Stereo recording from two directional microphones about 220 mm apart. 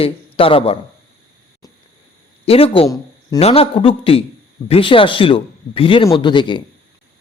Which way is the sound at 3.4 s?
25° left (ahead or behind).